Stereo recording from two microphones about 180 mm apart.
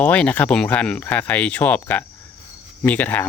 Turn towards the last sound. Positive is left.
turn(degrees=10)  # may be behind; listen again after turning